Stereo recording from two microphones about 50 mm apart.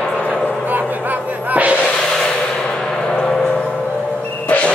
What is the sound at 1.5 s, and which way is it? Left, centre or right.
Music, right.